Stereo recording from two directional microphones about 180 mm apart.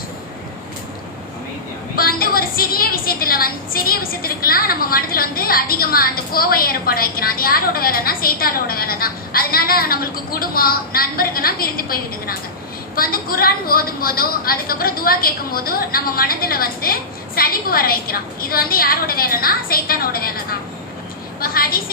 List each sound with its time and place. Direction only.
2.0 s a woman's voice: 55° left (ahead or behind)